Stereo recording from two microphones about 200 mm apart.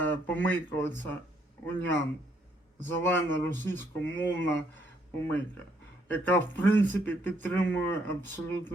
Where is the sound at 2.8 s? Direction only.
10° left (ahead or behind).